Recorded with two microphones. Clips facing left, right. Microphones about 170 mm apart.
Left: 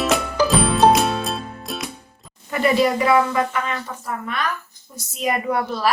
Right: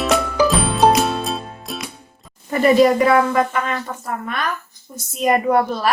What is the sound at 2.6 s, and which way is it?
A woman's voice, 45° right (ahead or behind).